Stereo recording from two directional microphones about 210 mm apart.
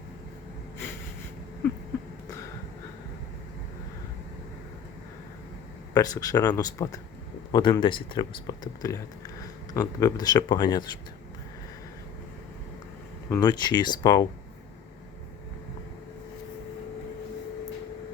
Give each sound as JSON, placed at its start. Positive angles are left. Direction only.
{"t": 5.9, "sound": "speech", "side_deg": 15}
{"t": 13.3, "sound": "speech", "side_deg": 20}